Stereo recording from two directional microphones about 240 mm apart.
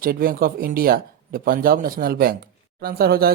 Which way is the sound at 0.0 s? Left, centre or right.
Right.